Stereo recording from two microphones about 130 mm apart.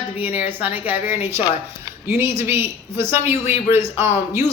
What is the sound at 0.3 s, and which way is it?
A man's voice, 15° right (ahead or behind).